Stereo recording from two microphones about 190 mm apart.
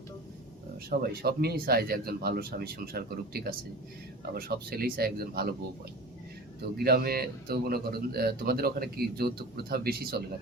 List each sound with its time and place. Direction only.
0.9 s speech: 55° right (ahead or behind)
6.7 s speech: 55° right (ahead or behind)